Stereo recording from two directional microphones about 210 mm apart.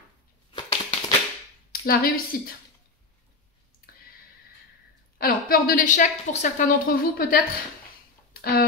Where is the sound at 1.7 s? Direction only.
45° left (ahead or behind).